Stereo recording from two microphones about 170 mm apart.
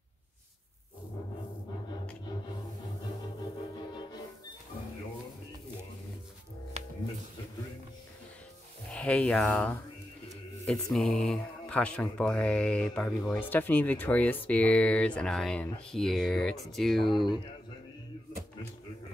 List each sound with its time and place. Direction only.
3.3 s music: 25° left (ahead or behind)
6.8 s music: 40° right (ahead or behind)
8.9 s speech: 5° left (ahead or behind)